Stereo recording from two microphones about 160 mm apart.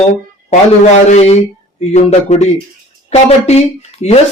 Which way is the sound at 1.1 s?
40° left (ahead or behind).